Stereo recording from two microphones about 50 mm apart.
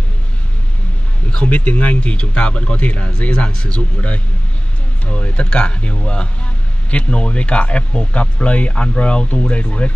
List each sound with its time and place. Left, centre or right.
1.3 s speech: left